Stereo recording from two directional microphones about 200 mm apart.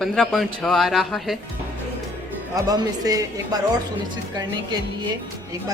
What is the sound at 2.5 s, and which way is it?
A woman's voice, 20° right (ahead or behind).